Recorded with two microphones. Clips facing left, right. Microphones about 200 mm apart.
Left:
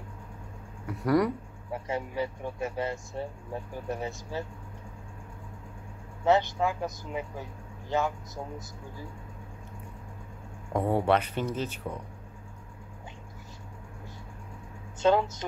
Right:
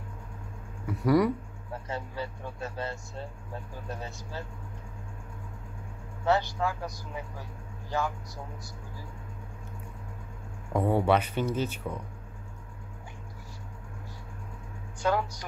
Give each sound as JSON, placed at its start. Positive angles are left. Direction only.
{"t": 0.8, "sound": "speech", "side_deg": 0}
{"t": 1.7, "sound": "speech", "side_deg": 15}
{"t": 6.2, "sound": "speech", "side_deg": 20}
{"t": 10.7, "sound": "speech", "side_deg": 0}
{"t": 15.0, "sound": "speech", "side_deg": 25}